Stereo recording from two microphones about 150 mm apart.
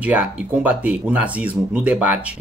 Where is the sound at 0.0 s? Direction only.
10° right (ahead or behind).